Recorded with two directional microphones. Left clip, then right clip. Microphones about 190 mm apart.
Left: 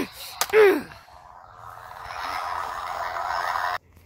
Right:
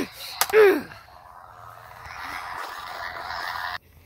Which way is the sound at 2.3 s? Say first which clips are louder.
Left 5 dB; 25° left (ahead or behind).